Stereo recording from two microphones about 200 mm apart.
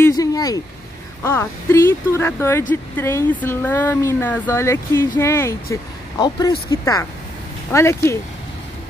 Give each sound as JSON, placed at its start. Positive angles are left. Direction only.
{"t": 0.0, "sound": "vehicle", "side_deg": 15}
{"t": 1.2, "sound": "speech", "side_deg": 10}